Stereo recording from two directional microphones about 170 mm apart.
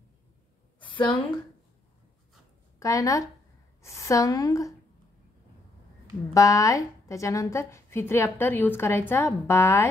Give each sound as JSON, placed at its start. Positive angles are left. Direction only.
{"t": 0.8, "sound": "a sound", "side_deg": 30}
{"t": 2.8, "sound": "a woman's voice", "side_deg": 20}
{"t": 6.3, "sound": "a woman's voice", "side_deg": 20}